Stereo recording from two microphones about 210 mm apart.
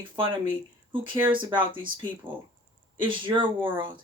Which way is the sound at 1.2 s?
25° right (ahead or behind).